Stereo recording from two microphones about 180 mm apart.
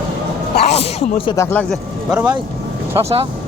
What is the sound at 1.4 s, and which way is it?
Speech, 15° left (ahead or behind).